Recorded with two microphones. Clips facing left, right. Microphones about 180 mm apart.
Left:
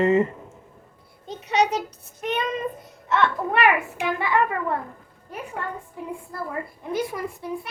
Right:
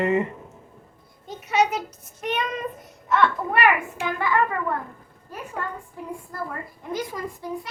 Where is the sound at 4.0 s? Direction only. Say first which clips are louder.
Left 1 dB; 20° left (ahead or behind).